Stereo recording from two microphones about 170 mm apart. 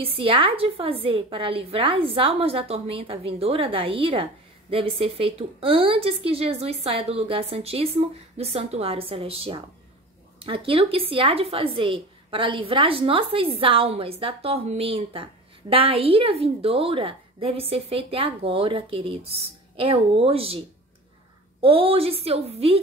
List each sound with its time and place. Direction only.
0.0 s a woman's voice: 35° right (ahead or behind)